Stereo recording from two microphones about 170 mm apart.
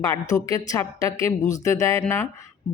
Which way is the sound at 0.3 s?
20° left (ahead or behind).